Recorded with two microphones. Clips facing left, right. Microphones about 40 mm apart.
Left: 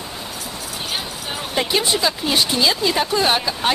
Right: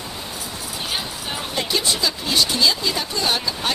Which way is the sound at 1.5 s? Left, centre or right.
Left.